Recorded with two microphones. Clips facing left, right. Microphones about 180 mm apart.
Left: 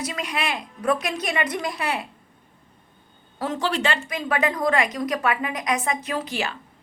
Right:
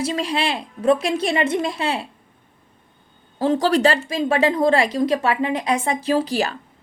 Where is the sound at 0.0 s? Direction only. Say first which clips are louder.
Right 6 dB; 30° right (ahead or behind).